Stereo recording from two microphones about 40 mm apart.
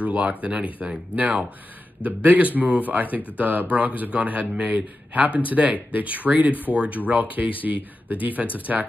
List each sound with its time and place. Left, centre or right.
0.0 s a man's voice: right
2.0 s a man's voice: right